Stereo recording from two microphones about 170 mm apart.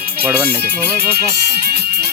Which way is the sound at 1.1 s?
70° right (ahead or behind).